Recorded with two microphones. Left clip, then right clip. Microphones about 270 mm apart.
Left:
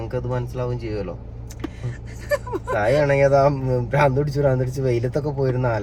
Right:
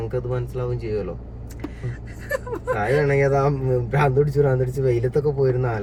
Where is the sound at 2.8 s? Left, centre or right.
Left.